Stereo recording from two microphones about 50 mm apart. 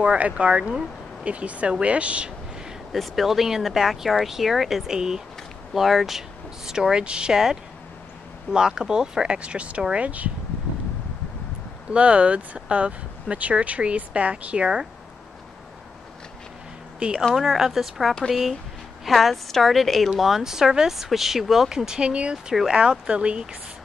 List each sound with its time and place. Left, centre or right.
0.0 s speech: right
2.9 s speech: centre
8.5 s speech: centre
11.9 s speech: right
17.0 s speech: right
17.4 s speech: centre